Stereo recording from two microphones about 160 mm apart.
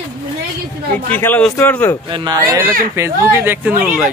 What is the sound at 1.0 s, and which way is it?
Speech, 10° left (ahead or behind).